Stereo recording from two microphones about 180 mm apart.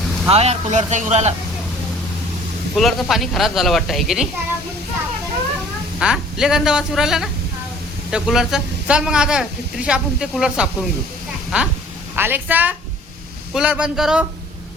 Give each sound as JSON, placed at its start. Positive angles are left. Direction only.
{"t": 0.0, "sound": "vehicle", "side_deg": 0}
{"t": 0.3, "sound": "speech", "side_deg": -35}
{"t": 2.7, "sound": "speech", "side_deg": 0}
{"t": 6.0, "sound": "a woman's voice", "side_deg": -5}